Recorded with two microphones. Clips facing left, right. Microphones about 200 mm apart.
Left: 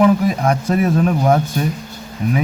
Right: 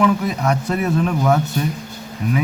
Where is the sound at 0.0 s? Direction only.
45° left (ahead or behind).